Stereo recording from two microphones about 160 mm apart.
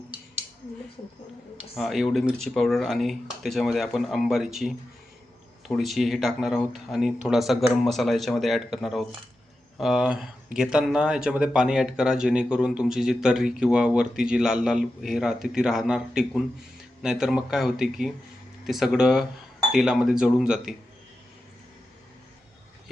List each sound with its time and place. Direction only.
1.5 s speech: centre (ahead or behind)